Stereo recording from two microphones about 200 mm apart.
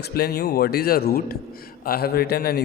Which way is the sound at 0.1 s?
50° left (ahead or behind).